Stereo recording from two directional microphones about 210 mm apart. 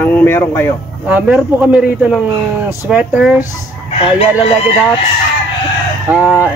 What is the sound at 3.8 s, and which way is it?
Fowl, 25° left (ahead or behind).